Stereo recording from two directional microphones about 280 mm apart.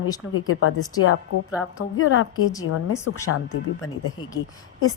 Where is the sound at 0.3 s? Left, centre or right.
Left.